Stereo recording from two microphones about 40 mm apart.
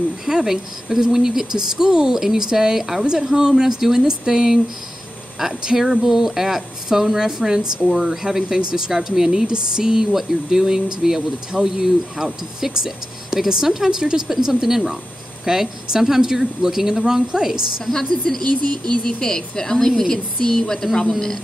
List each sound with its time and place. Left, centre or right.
0.2 s speech: centre
5.7 s speech: centre
14.2 s speech: centre
17.9 s a woman's voice: centre